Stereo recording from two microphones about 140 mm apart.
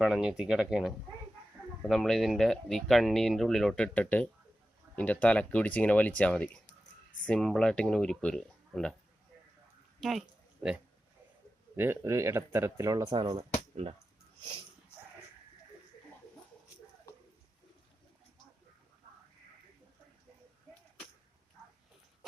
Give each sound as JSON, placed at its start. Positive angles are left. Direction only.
{"t": 0.0, "sound": "speech", "side_deg": -5}
{"t": 10.0, "sound": "a sound", "side_deg": 0}
{"t": 11.8, "sound": "speech", "side_deg": -15}